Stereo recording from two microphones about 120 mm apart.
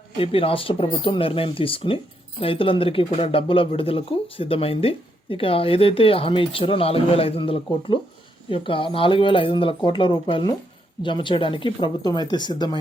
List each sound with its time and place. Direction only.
0.2 s speech: 50° left (ahead or behind)
12.0 s speech: 35° left (ahead or behind)